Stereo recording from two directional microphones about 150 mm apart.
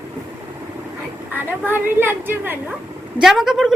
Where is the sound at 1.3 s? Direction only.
10° right (ahead or behind).